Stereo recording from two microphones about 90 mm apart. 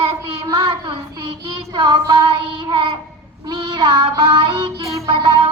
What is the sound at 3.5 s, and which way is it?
Child singing, 50° right (ahead or behind).